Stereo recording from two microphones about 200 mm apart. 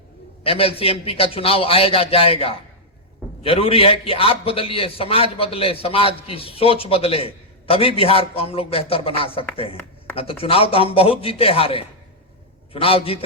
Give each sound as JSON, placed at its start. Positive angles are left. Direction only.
{"t": 0.4, "sound": "a man's voice", "side_deg": 30}